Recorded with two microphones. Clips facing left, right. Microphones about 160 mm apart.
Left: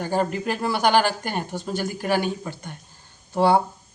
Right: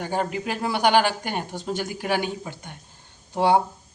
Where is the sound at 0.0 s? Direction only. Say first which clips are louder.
Left 3 dB; 15° right (ahead or behind).